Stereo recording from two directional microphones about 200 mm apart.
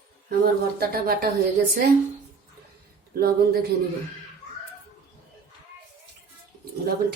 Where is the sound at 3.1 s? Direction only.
50° right (ahead or behind).